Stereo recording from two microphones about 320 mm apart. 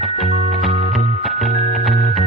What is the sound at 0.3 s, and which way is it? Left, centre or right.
Music, left.